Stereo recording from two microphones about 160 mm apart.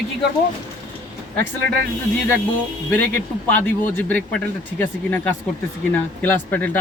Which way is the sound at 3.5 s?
10° left (ahead or behind).